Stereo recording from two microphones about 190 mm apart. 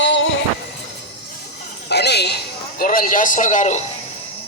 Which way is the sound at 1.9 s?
60° left (ahead or behind).